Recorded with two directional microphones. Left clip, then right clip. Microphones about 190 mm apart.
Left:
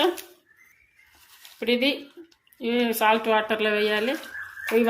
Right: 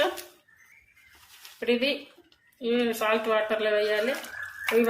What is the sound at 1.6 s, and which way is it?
A woman's voice, 55° left (ahead or behind).